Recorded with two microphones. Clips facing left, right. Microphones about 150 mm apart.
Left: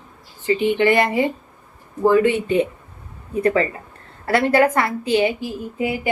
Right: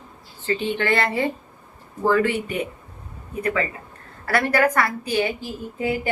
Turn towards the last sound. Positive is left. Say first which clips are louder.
# left 2 dB
turn(degrees=15)  # may be behind; listen again after turning